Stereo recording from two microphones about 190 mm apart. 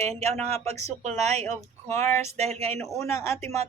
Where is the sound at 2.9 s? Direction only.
15° left (ahead or behind).